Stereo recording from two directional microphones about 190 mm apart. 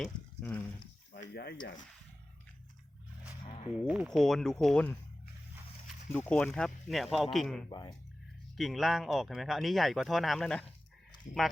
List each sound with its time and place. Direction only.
0.0 s a sound: 10° left (ahead or behind)
1.1 s speech: 55° left (ahead or behind)
3.4 s a sound: 35° left (ahead or behind)
3.8 s speech: 5° right (ahead or behind)
6.1 s speech: 10° left (ahead or behind)
7.7 s speech: 20° left (ahead or behind)
8.5 s speech: centre (ahead or behind)